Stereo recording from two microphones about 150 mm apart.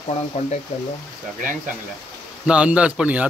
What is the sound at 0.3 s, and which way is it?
Speech, 50° left (ahead or behind).